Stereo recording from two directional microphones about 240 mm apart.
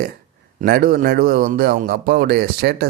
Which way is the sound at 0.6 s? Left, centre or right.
Right.